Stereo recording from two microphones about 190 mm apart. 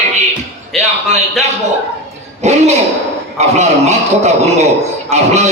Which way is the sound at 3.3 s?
35° right (ahead or behind).